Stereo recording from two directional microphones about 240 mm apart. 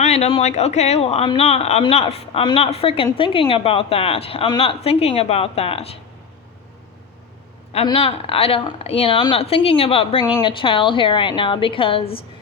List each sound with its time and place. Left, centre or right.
0.0 s speech: left
7.7 s speech: left